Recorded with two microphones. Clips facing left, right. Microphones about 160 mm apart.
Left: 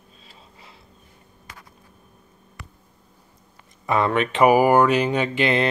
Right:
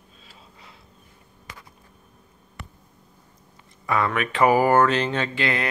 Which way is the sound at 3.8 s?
25° left (ahead or behind).